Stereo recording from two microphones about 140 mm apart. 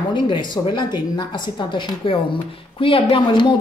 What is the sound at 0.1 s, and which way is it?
A woman's voice, 35° left (ahead or behind).